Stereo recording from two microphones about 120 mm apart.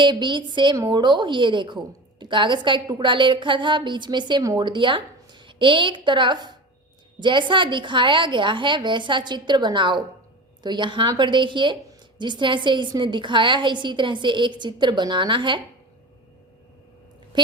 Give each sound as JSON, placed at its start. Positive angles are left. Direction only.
{"t": 0.0, "sound": "a woman's voice", "side_deg": -40}
{"t": 17.3, "sound": "a woman's voice", "side_deg": -40}